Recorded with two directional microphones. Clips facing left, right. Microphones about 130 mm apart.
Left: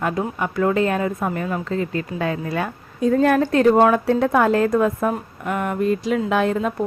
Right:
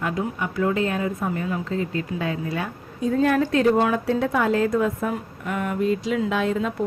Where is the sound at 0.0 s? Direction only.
45° left (ahead or behind).